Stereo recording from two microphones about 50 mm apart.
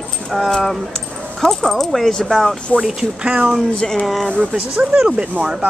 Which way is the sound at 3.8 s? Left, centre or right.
Centre.